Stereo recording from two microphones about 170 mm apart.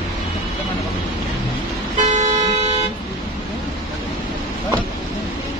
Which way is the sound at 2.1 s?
45° right (ahead or behind).